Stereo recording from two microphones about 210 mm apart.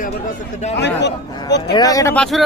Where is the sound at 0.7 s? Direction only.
55° left (ahead or behind).